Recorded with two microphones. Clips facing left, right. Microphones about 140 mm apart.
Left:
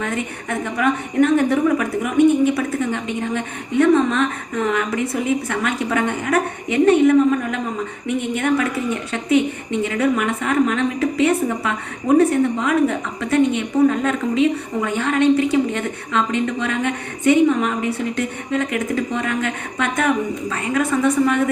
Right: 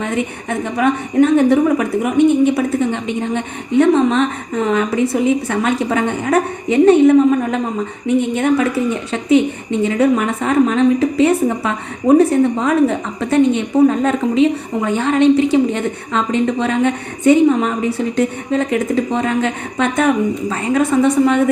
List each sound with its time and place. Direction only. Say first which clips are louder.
0.0 s a woman's voice: right 4 dB; 25° right (ahead or behind)